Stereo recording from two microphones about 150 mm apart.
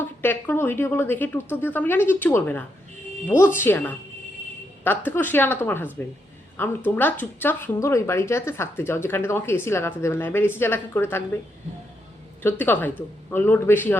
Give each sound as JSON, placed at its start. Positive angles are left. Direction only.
{"t": 0.0, "sound": "speech", "side_deg": 10}
{"t": 12.4, "sound": "speech", "side_deg": 15}